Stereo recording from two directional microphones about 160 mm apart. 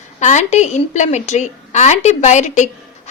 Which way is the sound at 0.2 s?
45° left (ahead or behind).